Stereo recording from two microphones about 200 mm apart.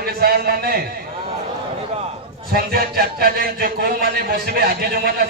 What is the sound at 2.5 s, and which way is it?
A man's voice, 50° right (ahead or behind).